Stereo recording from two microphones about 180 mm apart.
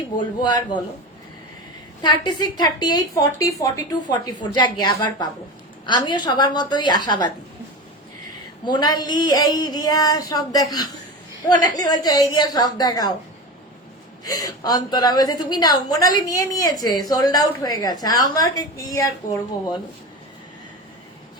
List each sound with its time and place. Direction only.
0.2 s a woman's voice: 25° left (ahead or behind)
2.0 s a woman's voice: 25° left (ahead or behind)
8.6 s a woman's voice: 25° left (ahead or behind)
14.3 s a woman's voice: 20° left (ahead or behind)